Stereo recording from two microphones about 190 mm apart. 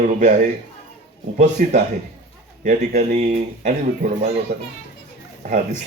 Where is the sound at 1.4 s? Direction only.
45° right (ahead or behind).